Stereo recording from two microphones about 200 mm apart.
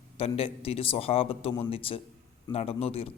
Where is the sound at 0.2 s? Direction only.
30° left (ahead or behind).